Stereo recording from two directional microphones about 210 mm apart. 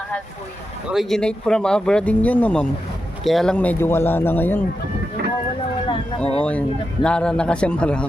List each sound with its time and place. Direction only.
0.9 s a man's voice: centre (ahead or behind)
6.4 s speech: 5° left (ahead or behind)